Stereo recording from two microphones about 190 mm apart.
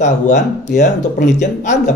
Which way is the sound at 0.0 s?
40° left (ahead or behind).